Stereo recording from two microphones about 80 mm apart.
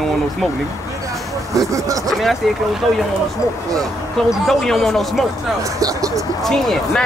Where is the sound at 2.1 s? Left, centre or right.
Centre.